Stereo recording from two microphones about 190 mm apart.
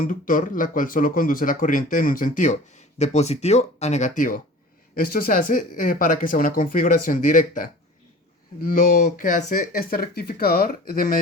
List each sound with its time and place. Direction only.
0.0 s speech: 45° left (ahead or behind)